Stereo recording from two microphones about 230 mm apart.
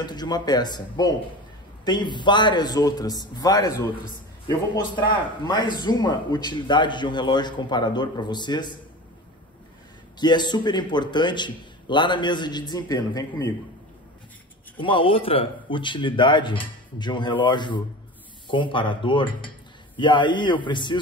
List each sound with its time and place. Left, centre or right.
0.0 s a man's voice: centre
10.2 s a man's voice: centre
14.8 s a man's voice: left